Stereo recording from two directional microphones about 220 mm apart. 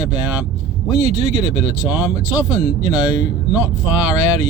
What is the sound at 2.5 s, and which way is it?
Speech, 15° left (ahead or behind).